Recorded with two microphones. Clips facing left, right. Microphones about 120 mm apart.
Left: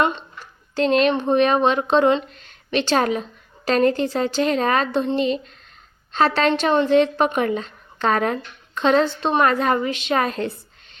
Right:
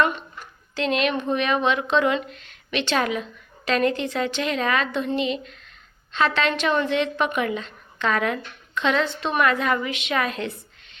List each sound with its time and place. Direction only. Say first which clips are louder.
0.0 s a child's voice: left 1 dB; 25° left (ahead or behind)
0.8 s speech: left 5 dB; 35° left (ahead or behind)